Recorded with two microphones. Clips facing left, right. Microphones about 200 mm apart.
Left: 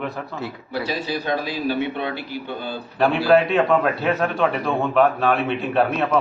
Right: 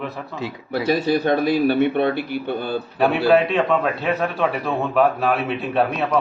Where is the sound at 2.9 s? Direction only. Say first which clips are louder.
Even; centre (ahead or behind).